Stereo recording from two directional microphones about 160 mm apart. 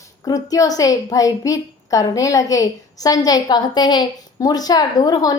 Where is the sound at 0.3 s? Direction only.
25° left (ahead or behind).